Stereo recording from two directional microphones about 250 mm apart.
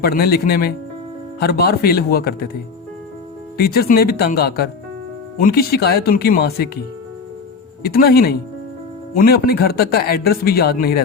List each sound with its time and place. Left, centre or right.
0.0 s speech: left
3.6 s speech: left
7.8 s speech: left